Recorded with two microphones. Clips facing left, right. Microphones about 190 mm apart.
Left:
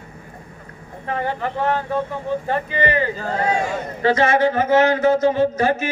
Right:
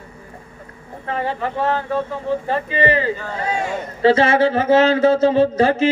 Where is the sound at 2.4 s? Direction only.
25° right (ahead or behind).